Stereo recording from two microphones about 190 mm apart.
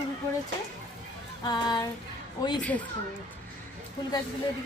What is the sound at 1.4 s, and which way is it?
Speech, 20° left (ahead or behind).